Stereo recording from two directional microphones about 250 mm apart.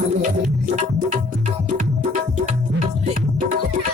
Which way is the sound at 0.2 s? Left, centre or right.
Right.